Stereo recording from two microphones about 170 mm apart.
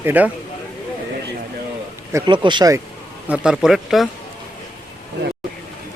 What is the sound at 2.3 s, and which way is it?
Speech, 25° right (ahead or behind).